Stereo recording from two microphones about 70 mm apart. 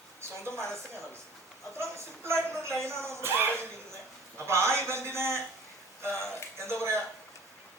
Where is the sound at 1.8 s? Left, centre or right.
Right.